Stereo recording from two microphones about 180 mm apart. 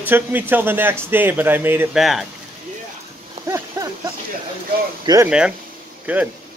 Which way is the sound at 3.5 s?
15° right (ahead or behind).